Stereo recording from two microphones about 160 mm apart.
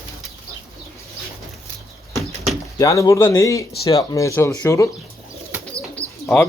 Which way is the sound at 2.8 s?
20° left (ahead or behind).